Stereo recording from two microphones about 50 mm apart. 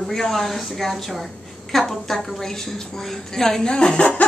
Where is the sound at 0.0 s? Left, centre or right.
Centre.